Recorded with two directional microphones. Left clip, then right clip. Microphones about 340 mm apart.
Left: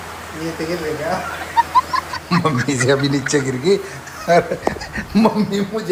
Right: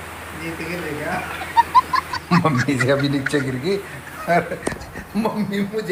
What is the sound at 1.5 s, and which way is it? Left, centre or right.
Speech, centre.